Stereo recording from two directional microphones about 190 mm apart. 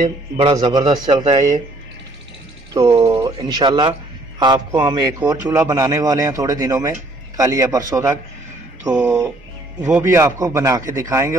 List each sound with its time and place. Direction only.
0.4 s speech: 25° right (ahead or behind)
2.7 s speech: 25° right (ahead or behind)